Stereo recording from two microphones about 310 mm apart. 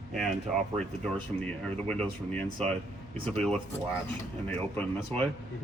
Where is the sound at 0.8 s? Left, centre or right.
Centre.